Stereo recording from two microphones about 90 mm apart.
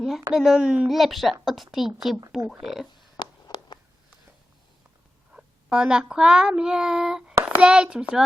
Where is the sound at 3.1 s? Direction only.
55° left (ahead or behind).